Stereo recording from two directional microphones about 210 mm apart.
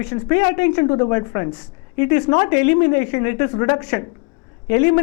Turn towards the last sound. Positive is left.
turn(degrees=15)  # may be behind; listen again after turning